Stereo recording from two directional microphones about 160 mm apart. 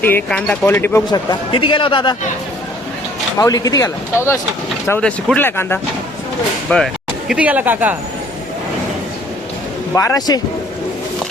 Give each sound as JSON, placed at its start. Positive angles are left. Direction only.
{"t": 0.0, "sound": "speech", "side_deg": 10}
{"t": 1.3, "sound": "a man's voice", "side_deg": 30}
{"t": 3.3, "sound": "speech", "side_deg": 20}
{"t": 4.9, "sound": "speech", "side_deg": 5}
{"t": 6.7, "sound": "speech", "side_deg": 0}
{"t": 9.9, "sound": "speech", "side_deg": 20}